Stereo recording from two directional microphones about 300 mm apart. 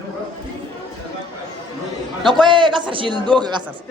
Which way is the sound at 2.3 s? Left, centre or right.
Centre.